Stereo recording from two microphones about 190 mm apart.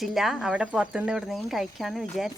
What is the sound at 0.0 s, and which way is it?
Speech, centre (ahead or behind).